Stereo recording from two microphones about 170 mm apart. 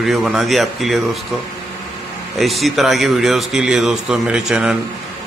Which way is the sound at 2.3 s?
Centre (ahead or behind).